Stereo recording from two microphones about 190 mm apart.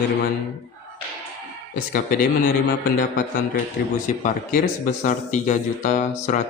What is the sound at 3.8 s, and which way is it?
Mantra, 50° left (ahead or behind).